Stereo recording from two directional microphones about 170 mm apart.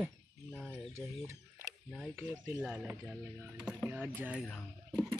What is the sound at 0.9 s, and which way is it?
Speech, 15° right (ahead or behind).